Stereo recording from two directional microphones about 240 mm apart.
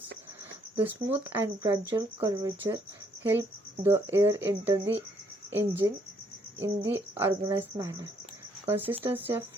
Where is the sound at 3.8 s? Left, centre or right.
Centre.